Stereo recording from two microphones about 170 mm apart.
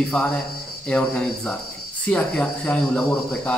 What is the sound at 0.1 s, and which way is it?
Speech, 5° left (ahead or behind).